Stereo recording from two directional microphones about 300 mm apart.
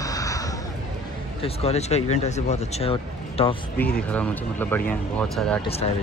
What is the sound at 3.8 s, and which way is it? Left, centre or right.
Speech, centre.